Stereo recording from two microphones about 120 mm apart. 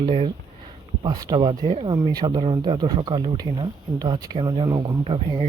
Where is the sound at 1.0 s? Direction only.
35° right (ahead or behind).